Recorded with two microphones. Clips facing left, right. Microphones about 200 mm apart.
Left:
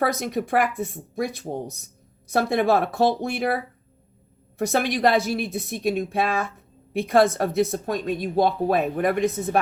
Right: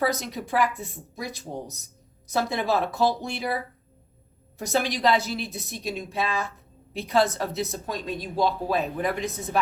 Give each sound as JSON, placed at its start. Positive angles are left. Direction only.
{"t": 0.0, "sound": "a woman's voice", "side_deg": 55}